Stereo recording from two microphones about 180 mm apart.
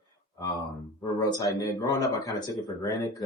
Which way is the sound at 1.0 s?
20° left (ahead or behind).